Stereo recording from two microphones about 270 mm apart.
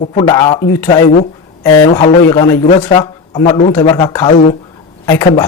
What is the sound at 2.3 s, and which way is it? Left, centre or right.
A man's voice, centre.